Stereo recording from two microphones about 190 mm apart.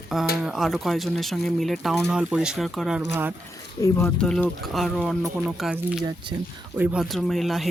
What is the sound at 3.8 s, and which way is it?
Speech, 15° left (ahead or behind).